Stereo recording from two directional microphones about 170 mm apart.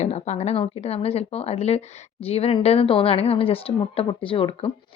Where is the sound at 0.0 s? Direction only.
40° left (ahead or behind).